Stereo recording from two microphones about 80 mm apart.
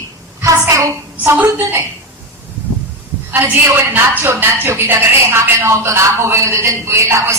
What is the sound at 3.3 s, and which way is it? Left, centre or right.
A woman's voice, right.